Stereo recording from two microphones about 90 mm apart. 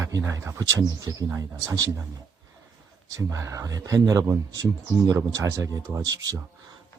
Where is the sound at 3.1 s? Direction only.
35° right (ahead or behind).